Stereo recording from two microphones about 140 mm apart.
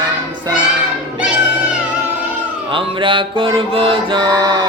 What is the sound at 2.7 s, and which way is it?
Mantra, 35° right (ahead or behind).